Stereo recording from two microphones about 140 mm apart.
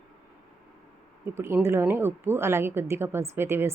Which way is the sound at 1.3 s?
20° right (ahead or behind).